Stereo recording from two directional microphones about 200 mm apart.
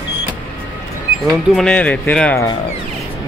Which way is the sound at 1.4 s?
5° left (ahead or behind).